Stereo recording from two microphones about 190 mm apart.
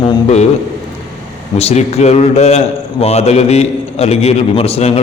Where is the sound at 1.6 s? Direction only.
35° left (ahead or behind).